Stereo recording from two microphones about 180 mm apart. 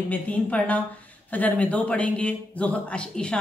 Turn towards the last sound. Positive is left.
turn(degrees=5)  # may be behind; listen again after turning